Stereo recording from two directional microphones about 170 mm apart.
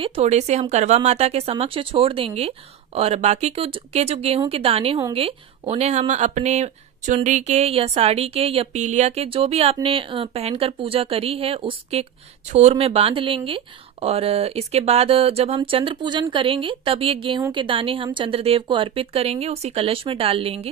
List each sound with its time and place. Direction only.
0.0 s speech: 35° right (ahead or behind)